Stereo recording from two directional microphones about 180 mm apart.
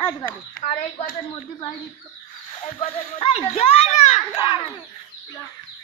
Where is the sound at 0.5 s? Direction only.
40° left (ahead or behind).